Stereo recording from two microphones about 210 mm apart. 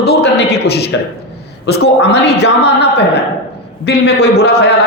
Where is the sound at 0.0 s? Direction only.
50° left (ahead or behind).